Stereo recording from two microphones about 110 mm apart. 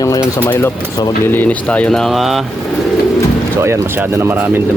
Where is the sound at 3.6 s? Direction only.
25° right (ahead or behind).